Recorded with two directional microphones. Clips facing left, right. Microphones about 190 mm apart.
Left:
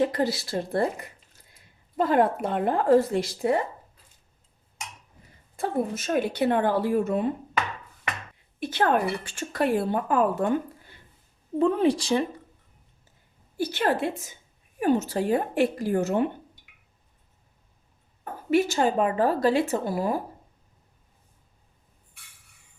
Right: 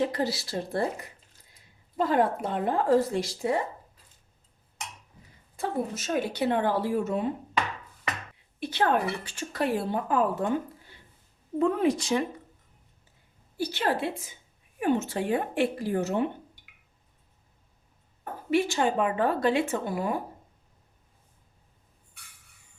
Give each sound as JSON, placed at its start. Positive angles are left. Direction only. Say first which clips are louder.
{"t": 0.1, "sound": "speech", "louder": "left 3 dB", "side_deg": 50}
{"t": 2.0, "sound": "speech", "louder": "left 3 dB", "side_deg": 55}
{"t": 5.5, "sound": "speech", "louder": "left 3 dB", "side_deg": 55}
{"t": 8.6, "sound": "speech", "louder": "left 2 dB", "side_deg": 50}
{"t": 11.6, "sound": "speech", "louder": "left 3 dB", "side_deg": 30}
{"t": 13.6, "sound": "speech", "louder": "left 3 dB", "side_deg": 50}
{"t": 18.5, "sound": "speech", "louder": "left 3 dB", "side_deg": 40}